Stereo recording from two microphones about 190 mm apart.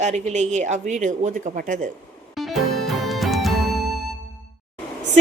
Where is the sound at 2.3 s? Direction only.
Centre (ahead or behind).